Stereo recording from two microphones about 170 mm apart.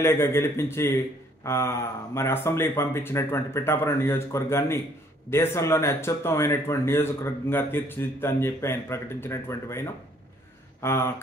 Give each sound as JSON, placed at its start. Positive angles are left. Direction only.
{"t": 0.0, "sound": "a man's voice", "side_deg": 15}